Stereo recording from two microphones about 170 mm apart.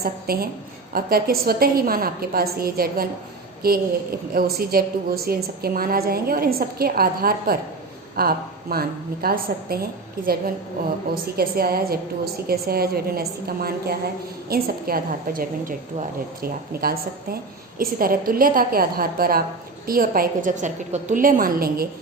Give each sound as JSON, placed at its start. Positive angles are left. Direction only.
{"t": 0.0, "sound": "a woman's voice", "side_deg": -60}
{"t": 11.1, "sound": "a woman's voice", "side_deg": -60}